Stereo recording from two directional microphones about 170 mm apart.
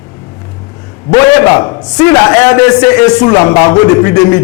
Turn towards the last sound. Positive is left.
turn(degrees=15)  # may be behind; listen again after turning